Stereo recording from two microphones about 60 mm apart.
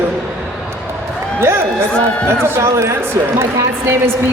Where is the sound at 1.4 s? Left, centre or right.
Right.